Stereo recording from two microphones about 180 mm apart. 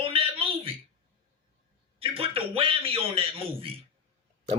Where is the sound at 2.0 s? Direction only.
30° right (ahead or behind).